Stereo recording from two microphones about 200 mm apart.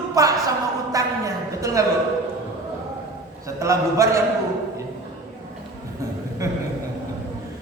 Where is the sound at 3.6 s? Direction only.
15° right (ahead or behind).